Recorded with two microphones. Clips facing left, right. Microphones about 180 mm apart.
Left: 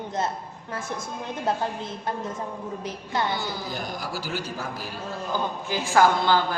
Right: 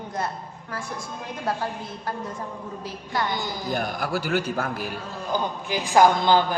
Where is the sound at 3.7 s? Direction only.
60° right (ahead or behind).